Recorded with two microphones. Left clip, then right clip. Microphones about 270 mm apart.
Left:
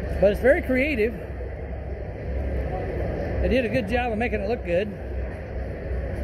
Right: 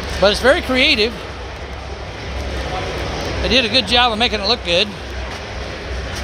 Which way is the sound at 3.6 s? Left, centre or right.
Right.